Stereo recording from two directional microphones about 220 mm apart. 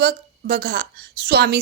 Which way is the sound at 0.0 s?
45° right (ahead or behind).